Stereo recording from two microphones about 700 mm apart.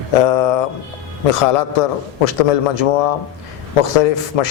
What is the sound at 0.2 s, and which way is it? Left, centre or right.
Speech, left.